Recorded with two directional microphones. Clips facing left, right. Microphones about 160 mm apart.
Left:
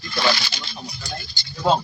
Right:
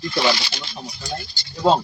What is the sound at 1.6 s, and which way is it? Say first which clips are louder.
Speech: right 3 dB; 25° right (ahead or behind).